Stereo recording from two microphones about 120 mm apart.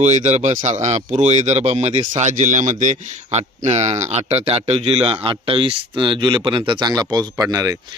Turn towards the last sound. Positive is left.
turn(degrees=-30)  # may be behind; listen again after turning